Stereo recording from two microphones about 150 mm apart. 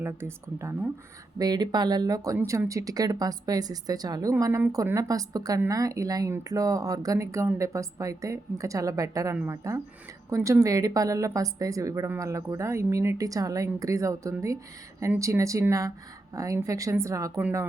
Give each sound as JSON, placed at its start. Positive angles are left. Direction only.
{"t": 0.0, "sound": "speech", "side_deg": -15}